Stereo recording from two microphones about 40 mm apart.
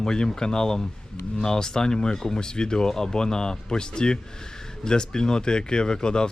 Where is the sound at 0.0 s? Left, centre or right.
Centre.